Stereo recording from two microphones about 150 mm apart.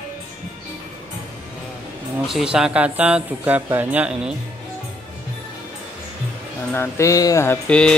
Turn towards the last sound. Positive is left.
turn(degrees=5)  # may be behind; listen again after turning